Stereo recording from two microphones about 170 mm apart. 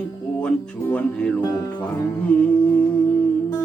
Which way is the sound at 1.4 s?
15° left (ahead or behind).